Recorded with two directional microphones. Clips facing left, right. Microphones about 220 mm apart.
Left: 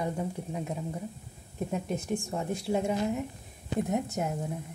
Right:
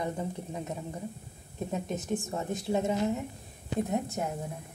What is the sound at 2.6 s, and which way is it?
A woman's voice, 10° left (ahead or behind).